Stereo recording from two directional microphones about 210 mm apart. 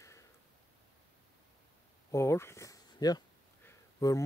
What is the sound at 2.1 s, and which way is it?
Speech, 15° left (ahead or behind).